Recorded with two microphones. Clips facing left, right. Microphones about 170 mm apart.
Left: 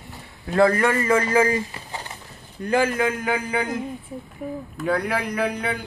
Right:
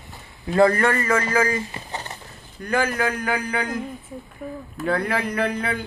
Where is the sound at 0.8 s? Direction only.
20° left (ahead or behind).